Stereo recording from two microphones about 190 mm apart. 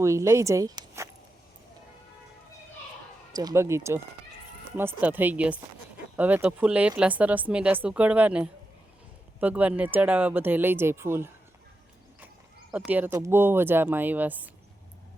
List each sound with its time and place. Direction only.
0.0 s speech: 15° right (ahead or behind)
3.3 s speech: 15° right (ahead or behind)
12.7 s speech: 10° right (ahead or behind)